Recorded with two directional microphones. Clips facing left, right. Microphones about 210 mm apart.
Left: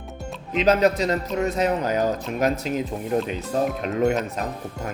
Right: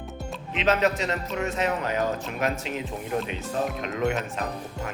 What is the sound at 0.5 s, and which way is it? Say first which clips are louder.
A man's voice: left 5 dB; 35° left (ahead or behind).